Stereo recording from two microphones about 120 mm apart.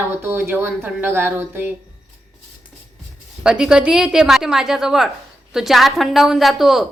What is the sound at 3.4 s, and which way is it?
A woman's voice, 5° right (ahead or behind).